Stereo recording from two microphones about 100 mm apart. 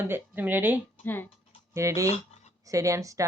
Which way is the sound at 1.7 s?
30° right (ahead or behind).